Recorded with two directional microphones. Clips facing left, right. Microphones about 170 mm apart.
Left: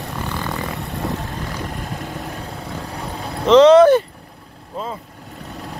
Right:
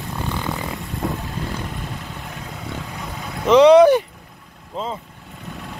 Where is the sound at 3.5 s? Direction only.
10° right (ahead or behind).